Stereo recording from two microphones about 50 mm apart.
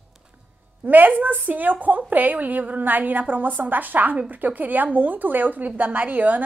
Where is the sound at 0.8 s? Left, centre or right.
Right.